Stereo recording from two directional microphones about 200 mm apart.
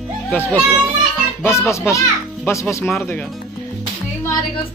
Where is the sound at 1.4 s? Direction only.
15° left (ahead or behind).